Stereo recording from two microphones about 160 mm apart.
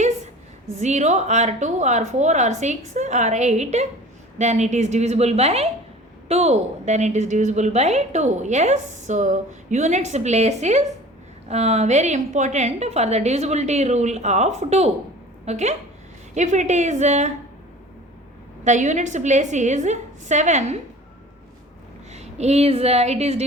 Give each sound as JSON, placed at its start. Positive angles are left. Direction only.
{"t": 0.7, "sound": "a woman's voice", "side_deg": -45}
{"t": 18.6, "sound": "a woman's voice", "side_deg": -50}
{"t": 22.1, "sound": "a woman's voice", "side_deg": -45}